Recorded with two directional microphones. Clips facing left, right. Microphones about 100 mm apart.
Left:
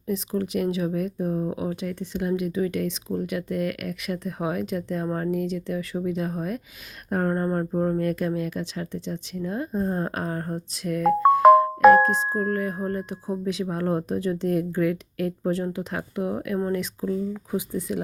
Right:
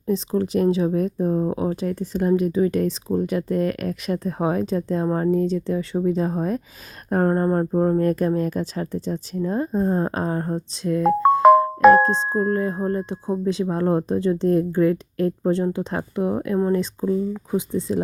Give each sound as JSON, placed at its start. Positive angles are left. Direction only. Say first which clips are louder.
{"t": 0.1, "sound": "speech", "louder": "right 5 dB", "side_deg": -30}